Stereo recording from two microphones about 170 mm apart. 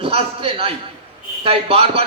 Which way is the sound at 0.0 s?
35° right (ahead or behind).